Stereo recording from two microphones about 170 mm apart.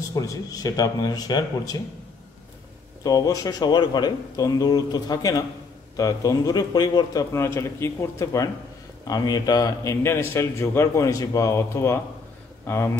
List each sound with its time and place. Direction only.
0.1 s a man's voice: 20° left (ahead or behind)
3.0 s a man's voice: 20° left (ahead or behind)